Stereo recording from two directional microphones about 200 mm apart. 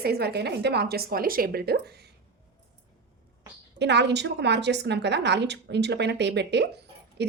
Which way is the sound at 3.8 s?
60° right (ahead or behind).